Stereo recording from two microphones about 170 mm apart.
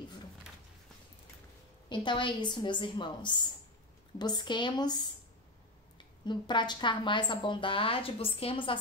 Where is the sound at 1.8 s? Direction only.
30° left (ahead or behind).